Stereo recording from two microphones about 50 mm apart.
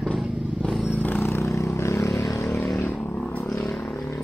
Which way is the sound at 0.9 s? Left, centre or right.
Left.